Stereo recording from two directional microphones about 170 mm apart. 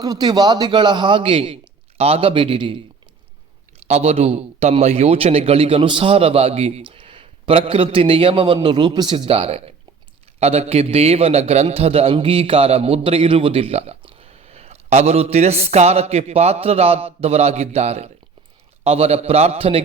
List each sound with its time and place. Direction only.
0.0 s a man's voice: 25° right (ahead or behind)
3.8 s a man's voice: 40° right (ahead or behind)